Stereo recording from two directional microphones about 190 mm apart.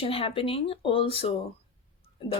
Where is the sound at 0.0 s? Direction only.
30° left (ahead or behind).